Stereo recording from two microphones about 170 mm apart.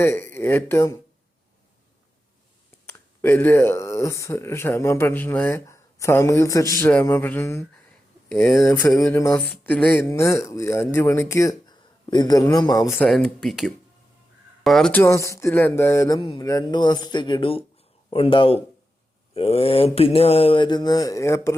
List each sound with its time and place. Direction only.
0.0 s speech: 15° left (ahead or behind)
2.8 s speech: 15° left (ahead or behind)
9.5 s speech: 5° left (ahead or behind)
13.1 s speech: centre (ahead or behind); by 17.7 s 30° left (ahead or behind)
18.1 s a sound: 30° left (ahead or behind)